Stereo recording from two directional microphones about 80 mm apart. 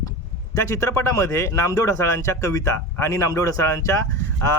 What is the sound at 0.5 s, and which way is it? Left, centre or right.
Speech, left.